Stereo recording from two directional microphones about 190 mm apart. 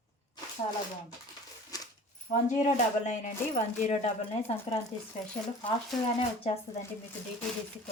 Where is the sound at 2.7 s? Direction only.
40° left (ahead or behind).